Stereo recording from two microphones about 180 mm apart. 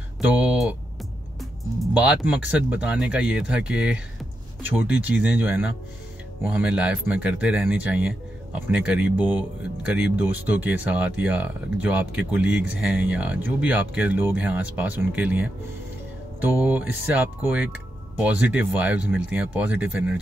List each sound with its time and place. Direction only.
0.3 s speech: 5° right (ahead or behind)
1.8 s speech: 10° right (ahead or behind)
16.5 s speech: 10° right (ahead or behind)